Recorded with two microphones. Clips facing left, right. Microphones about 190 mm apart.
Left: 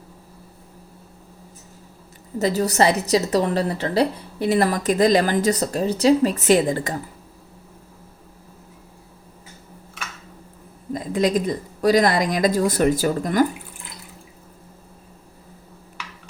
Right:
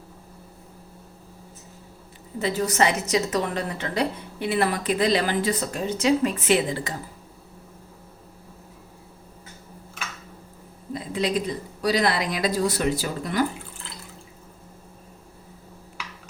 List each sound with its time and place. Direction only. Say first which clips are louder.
2.4 s a woman's voice: left 4 dB; 40° left (ahead or behind)
10.9 s speech: left 5 dB; 45° left (ahead or behind)